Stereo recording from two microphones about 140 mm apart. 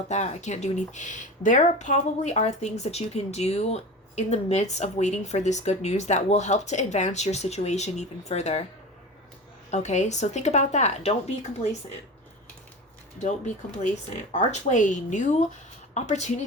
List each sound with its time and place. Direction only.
0.1 s speech: 55° left (ahead or behind)
9.7 s speech: 55° left (ahead or behind)
13.1 s speech: 55° left (ahead or behind)